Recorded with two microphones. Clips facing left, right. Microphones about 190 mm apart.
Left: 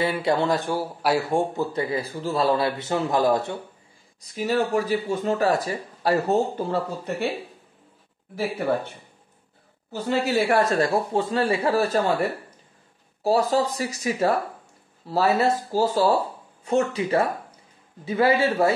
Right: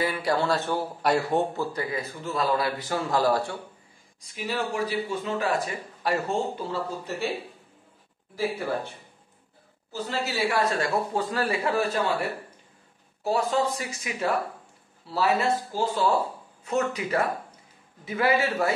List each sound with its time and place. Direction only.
0.0 s speech: 25° left (ahead or behind)
4.2 s speech: 45° left (ahead or behind)
6.6 s a woman's voice: 55° left (ahead or behind)
9.9 s a woman's voice: 60° left (ahead or behind)
10.8 s speech: 30° left (ahead or behind)